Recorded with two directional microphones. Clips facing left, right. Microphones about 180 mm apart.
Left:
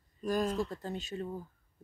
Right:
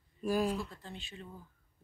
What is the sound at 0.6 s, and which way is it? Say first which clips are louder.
Speech: left 7 dB; 40° left (ahead or behind).